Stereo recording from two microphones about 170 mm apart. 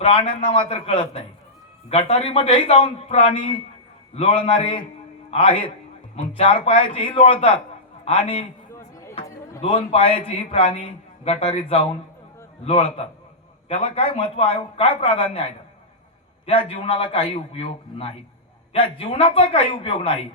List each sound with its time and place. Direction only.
0.0 s a man's voice: 30° left (ahead or behind)
8.7 s chop: 15° left (ahead or behind)
9.6 s a man's voice: 35° left (ahead or behind)
16.5 s a man's voice: 35° left (ahead or behind)